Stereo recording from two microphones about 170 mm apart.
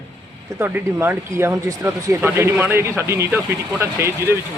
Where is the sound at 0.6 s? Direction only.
15° right (ahead or behind).